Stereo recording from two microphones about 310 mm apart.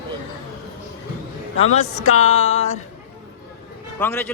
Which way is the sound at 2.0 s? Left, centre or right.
Left.